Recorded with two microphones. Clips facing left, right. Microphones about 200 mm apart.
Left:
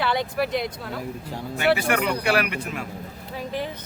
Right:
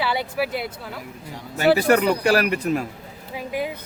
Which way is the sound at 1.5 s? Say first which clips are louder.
Right 5 dB; 40° right (ahead or behind).